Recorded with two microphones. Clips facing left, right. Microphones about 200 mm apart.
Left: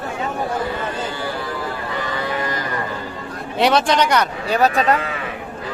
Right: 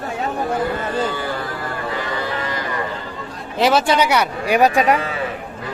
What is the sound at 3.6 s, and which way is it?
Speech, 5° right (ahead or behind).